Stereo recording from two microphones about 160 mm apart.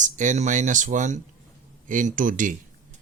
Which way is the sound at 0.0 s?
50° right (ahead or behind).